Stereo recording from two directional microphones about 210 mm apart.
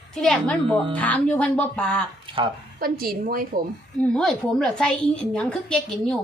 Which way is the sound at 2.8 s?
45° right (ahead or behind).